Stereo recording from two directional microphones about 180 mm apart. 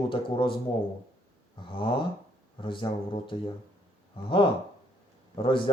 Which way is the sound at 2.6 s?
30° left (ahead or behind).